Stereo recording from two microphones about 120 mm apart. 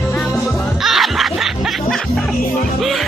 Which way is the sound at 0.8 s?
Centre (ahead or behind).